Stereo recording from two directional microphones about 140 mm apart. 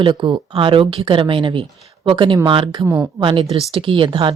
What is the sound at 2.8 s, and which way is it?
Speech, 15° right (ahead or behind).